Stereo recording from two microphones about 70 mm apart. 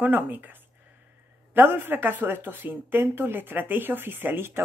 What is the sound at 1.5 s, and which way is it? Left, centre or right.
Speech, right.